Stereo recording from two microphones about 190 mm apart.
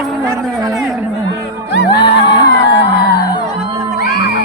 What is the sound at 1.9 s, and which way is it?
Music, 25° left (ahead or behind).